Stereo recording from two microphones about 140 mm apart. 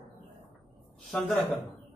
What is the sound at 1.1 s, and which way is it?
Speech, 5° left (ahead or behind).